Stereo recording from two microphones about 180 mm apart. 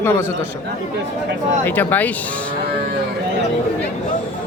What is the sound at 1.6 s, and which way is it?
Speech, 10° left (ahead or behind).